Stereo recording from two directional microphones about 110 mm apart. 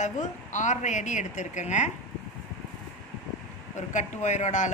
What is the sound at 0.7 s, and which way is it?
A man's voice, 90° left.